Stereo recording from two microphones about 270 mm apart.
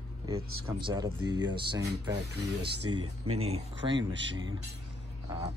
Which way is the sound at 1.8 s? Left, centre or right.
Right.